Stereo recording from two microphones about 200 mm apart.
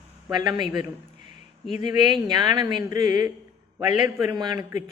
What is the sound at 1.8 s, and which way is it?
Speech, 20° right (ahead or behind).